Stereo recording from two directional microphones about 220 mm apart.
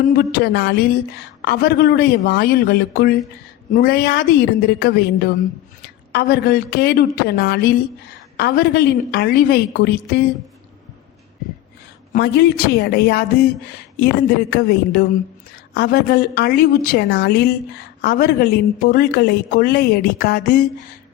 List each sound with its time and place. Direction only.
0.1 s a woman's voice: 40° left (ahead or behind)
12.1 s a woman's voice: 45° left (ahead or behind)